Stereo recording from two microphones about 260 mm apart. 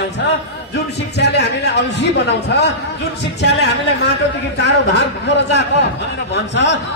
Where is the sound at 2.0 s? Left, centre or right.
Left.